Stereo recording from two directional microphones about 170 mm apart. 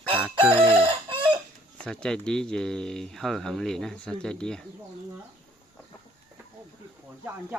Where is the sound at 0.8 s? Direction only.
30° right (ahead or behind).